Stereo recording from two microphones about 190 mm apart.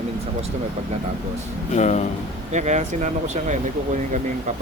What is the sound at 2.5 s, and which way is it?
Speech, 40° right (ahead or behind).